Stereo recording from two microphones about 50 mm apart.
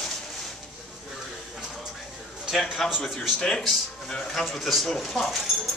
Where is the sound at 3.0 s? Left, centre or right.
Centre.